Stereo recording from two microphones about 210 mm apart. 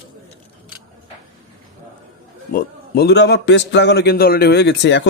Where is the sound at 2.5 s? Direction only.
50° left (ahead or behind).